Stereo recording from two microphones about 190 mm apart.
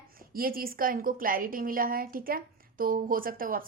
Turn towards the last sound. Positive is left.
turn(degrees=-50)  # may be behind; listen again after turning